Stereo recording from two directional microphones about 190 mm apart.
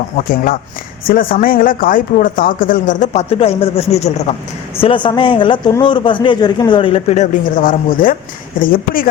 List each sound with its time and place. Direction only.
1.0 s speech: 50° left (ahead or behind)